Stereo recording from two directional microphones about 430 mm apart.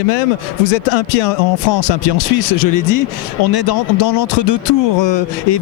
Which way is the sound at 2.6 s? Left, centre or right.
Left.